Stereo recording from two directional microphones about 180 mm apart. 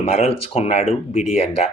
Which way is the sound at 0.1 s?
35° left (ahead or behind).